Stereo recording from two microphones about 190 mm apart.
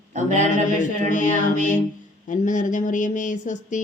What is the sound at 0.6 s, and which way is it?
Speech, 40° left (ahead or behind).